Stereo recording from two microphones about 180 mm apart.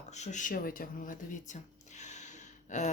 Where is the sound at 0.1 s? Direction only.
40° left (ahead or behind).